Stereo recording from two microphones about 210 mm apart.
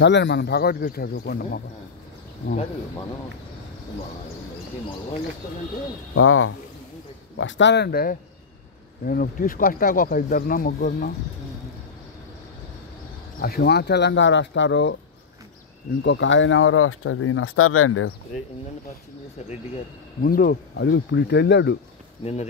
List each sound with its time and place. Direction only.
0.0 s speech: 55° left (ahead or behind)
6.1 s speech: 75° left (ahead or behind)
7.3 s speech: 60° left (ahead or behind); by 11.1 s 45° left (ahead or behind)
13.4 s speech: 50° left (ahead or behind)
16.0 s speech: 60° left (ahead or behind); by 18.1 s 80° left
20.2 s speech: 45° left (ahead or behind)
22.2 s speech: 30° left (ahead or behind)